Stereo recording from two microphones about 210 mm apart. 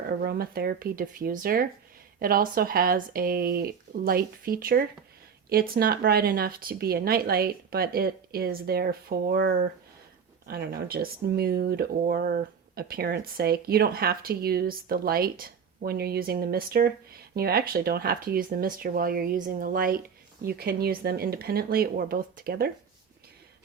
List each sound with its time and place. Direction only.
0.2 s speech: 45° right (ahead or behind)